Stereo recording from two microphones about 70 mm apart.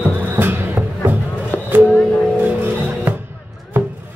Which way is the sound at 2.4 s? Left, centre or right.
Right.